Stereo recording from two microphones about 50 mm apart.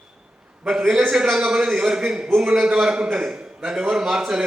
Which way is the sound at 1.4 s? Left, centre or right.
Centre.